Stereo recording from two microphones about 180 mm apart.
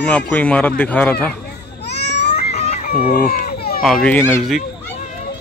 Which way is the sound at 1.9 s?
70° left (ahead or behind).